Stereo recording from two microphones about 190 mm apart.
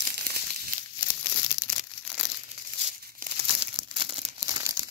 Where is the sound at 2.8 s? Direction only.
50° right (ahead or behind).